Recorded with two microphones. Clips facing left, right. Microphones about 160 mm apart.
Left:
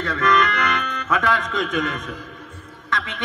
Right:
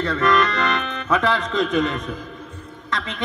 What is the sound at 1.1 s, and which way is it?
Speech, 20° right (ahead or behind).